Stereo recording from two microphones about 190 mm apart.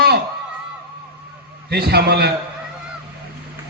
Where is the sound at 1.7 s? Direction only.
60° right (ahead or behind).